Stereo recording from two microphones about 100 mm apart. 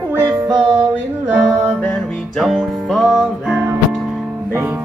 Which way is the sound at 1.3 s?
10° right (ahead or behind).